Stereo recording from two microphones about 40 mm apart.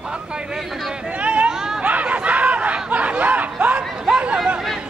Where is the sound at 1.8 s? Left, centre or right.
Right.